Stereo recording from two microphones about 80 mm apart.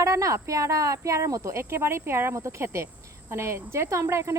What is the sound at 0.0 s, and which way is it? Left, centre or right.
Speech, right.